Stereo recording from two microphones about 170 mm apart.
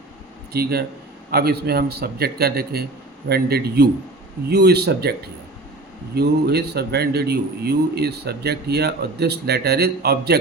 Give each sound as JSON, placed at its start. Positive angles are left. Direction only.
{"t": 0.5, "sound": "speech", "side_deg": -65}
{"t": 6.1, "sound": "speech", "side_deg": -70}